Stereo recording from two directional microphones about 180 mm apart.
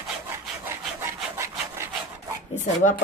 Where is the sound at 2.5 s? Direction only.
40° left (ahead or behind).